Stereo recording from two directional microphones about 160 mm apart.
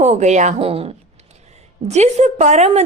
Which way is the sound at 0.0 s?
45° right (ahead or behind).